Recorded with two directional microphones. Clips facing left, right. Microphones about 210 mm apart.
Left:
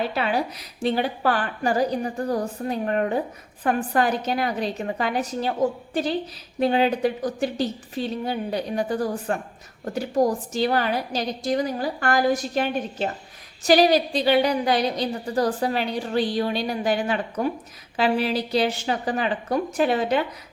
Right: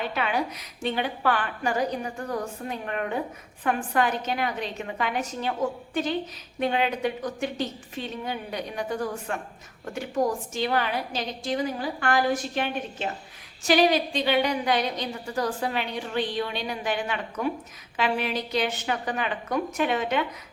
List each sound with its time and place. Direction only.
0.0 s a woman's voice: 35° left (ahead or behind)